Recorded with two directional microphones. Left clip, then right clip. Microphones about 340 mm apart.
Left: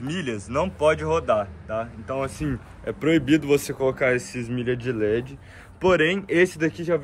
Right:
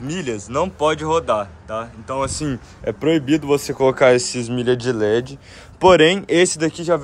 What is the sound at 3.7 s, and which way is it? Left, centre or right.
Speech, right.